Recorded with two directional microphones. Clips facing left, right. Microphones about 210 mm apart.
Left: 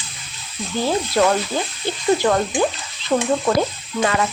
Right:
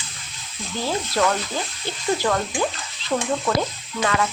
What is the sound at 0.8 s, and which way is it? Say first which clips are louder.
Frying: left 4 dB; 25° left (ahead or behind).